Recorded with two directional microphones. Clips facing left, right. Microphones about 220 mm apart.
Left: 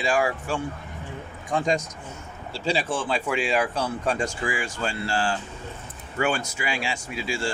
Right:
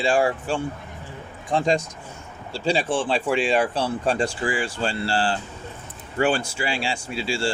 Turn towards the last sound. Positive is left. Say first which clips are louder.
# right 3 dB
turn(degrees=-30)  # may be behind; listen again after turning